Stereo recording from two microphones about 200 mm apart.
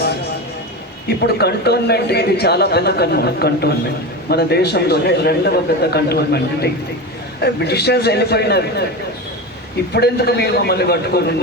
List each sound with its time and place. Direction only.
1.2 s a man's voice: 55° left (ahead or behind)
9.9 s a man's voice: 55° left (ahead or behind)